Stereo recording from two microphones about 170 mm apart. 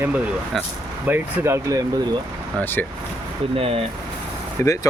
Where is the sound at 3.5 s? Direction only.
35° right (ahead or behind).